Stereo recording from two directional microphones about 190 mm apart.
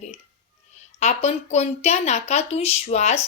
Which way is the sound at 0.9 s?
35° left (ahead or behind).